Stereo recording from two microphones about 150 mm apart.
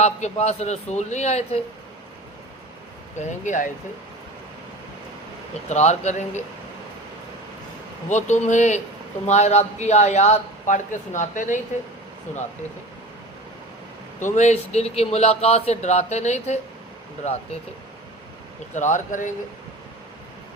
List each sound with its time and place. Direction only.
0.0 s speech: 45° left (ahead or behind)
3.2 s speech: 55° left (ahead or behind)
5.6 s speech: 50° left (ahead or behind)
8.1 s speech: 55° left (ahead or behind)
14.3 s speech: 50° left (ahead or behind)
18.7 s speech: 55° left (ahead or behind)